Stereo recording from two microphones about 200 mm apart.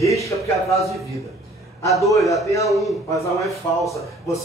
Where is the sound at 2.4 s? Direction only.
15° left (ahead or behind).